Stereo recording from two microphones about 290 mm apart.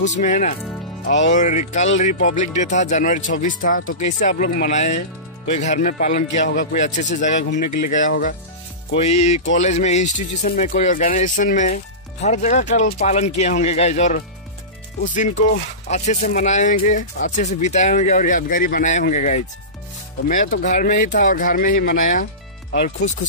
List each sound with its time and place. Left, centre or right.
0.0 s speech: left
7.6 s speech: left
7.9 s speech: left